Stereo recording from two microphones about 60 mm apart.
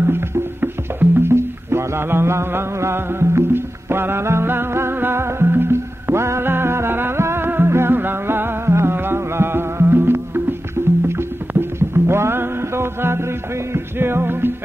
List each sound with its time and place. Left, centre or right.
0.0 s music: right